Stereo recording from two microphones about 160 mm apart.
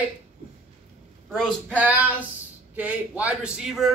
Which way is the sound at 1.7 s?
10° right (ahead or behind).